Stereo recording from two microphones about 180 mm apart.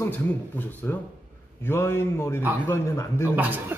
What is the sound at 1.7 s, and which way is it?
A man's voice, 15° left (ahead or behind).